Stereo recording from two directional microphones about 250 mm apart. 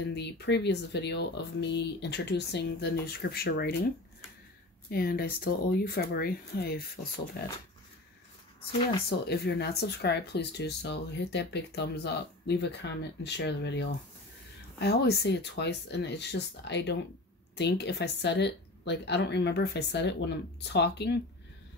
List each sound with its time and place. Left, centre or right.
0.1 s speech: left
4.8 s speech: left
9.3 s speech: left